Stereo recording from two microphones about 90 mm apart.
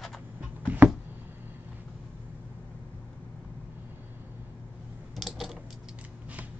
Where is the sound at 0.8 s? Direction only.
20° right (ahead or behind).